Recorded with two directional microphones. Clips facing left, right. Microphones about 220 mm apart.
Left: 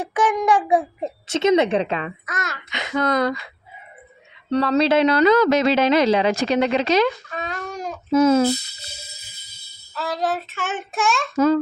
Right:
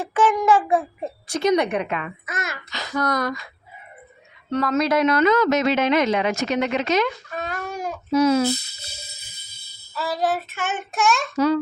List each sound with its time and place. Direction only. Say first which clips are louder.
0.1 s a child's voice: right 1 dB; 10° left (ahead or behind); by 2.1 s 30° left (ahead or behind)
2.2 s child singing: even; 5° right (ahead or behind)
2.6 s a child's voice: left 3 dB; 20° left (ahead or behind)
4.5 s speech: left 3 dB; 30° left (ahead or behind)
7.3 s baby cry: even; 5° right (ahead or behind)
8.1 s speech: left 2 dB; 50° left (ahead or behind)
9.9 s child singing: right 1 dB; 5° right (ahead or behind)
11.3 s speech: left 4 dB; 45° left (ahead or behind)